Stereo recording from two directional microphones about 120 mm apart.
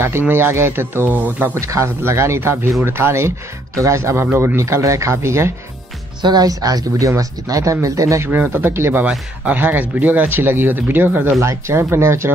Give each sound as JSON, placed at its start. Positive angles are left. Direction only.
{"t": 0.0, "sound": "speech", "side_deg": -20}
{"t": 6.2, "sound": "speech", "side_deg": -35}
{"t": 9.0, "sound": "speech", "side_deg": -10}